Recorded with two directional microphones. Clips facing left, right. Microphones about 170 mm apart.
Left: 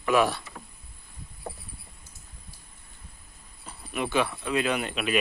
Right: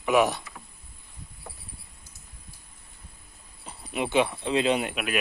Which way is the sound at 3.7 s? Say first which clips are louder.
Right 1 dB; 20° right (ahead or behind).